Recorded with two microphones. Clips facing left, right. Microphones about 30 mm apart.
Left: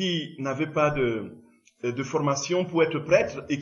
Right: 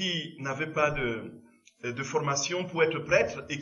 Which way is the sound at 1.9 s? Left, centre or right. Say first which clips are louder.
Left 3 dB; right.